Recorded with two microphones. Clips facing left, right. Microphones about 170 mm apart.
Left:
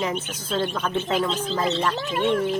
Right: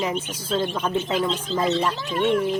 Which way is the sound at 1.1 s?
Centre (ahead or behind).